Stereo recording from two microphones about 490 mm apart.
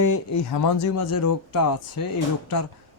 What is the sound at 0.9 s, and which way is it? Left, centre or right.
Speech, left.